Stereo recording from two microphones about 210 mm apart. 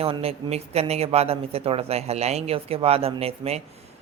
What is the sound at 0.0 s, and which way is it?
Speech, 25° right (ahead or behind).